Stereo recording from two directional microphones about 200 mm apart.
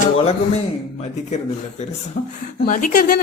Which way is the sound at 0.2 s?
30° left (ahead or behind).